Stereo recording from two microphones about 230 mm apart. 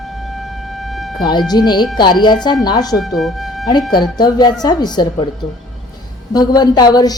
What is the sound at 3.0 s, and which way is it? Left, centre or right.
Speech, centre.